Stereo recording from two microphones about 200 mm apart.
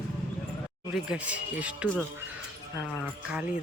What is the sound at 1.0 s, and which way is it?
Speech, 5° right (ahead or behind).